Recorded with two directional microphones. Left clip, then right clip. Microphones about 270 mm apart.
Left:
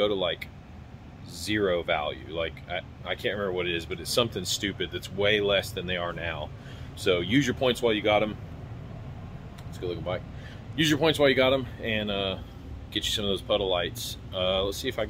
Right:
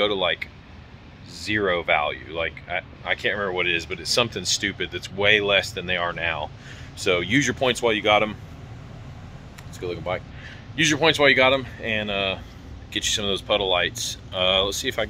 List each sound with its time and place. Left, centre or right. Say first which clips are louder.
0.0 s speech: right 4 dB; centre
9.8 s speech: right 4 dB; centre
10.8 s speech: right 4 dB; centre